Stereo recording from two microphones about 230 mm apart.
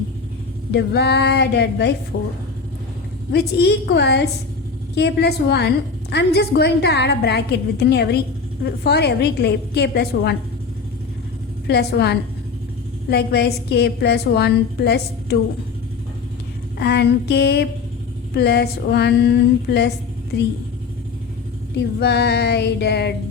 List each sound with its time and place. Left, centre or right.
0.7 s a woman's voice: left
3.3 s a woman's voice: left
11.7 s a woman's voice: left
16.7 s a woman's voice: left
21.8 s a woman's voice: left